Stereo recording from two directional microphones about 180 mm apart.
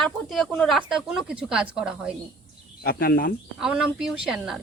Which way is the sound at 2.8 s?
55° left (ahead or behind).